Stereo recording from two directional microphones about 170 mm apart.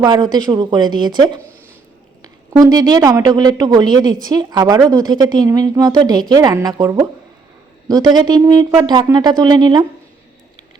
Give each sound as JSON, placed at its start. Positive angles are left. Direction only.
{"t": 0.0, "sound": "speech", "side_deg": -25}